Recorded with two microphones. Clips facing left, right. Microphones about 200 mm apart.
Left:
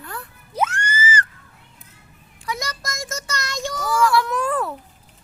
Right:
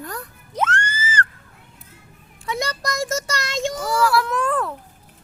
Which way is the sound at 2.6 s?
35° right (ahead or behind).